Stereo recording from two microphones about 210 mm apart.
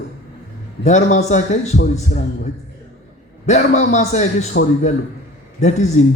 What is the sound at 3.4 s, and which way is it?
Speech, 35° left (ahead or behind).